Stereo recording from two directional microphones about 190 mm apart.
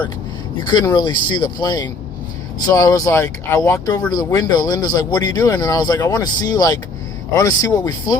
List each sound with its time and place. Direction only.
0.6 s speech: 20° left (ahead or behind)